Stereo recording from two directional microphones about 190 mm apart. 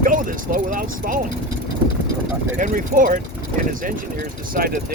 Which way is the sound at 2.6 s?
45° right (ahead or behind).